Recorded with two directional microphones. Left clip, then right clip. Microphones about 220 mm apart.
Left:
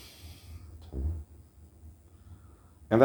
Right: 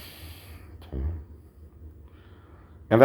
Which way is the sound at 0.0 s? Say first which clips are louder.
Right 6 dB; 10° right (ahead or behind).